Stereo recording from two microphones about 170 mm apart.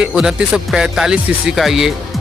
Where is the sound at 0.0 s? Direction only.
5° right (ahead or behind).